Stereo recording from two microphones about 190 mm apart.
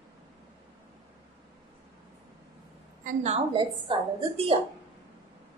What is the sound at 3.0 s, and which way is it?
A woman's voice, 35° right (ahead or behind).